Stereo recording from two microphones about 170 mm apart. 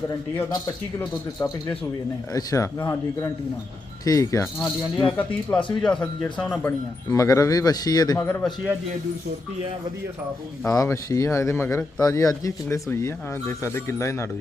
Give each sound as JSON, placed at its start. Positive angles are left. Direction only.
{"t": 2.3, "sound": "speech", "side_deg": 20}
{"t": 4.9, "sound": "speech", "side_deg": 5}
{"t": 5.5, "sound": "speech", "side_deg": 30}
{"t": 5.8, "sound": "speech", "side_deg": 5}
{"t": 7.1, "sound": "speech", "side_deg": 20}
{"t": 8.2, "sound": "speech", "side_deg": 10}
{"t": 10.7, "sound": "speech", "side_deg": 20}